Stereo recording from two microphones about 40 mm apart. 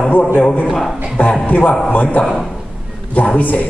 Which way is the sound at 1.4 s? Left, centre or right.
Left.